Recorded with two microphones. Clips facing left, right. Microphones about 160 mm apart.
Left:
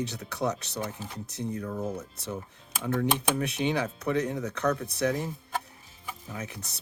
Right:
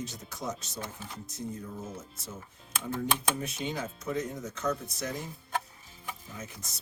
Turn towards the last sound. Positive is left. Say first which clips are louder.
# left 5 dB
turn(degrees=65)  # may be behind; listen again after turning